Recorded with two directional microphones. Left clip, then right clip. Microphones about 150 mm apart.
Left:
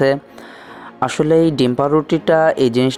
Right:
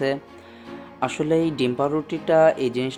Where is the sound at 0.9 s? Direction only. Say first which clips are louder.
Left 8 dB; 40° left (ahead or behind).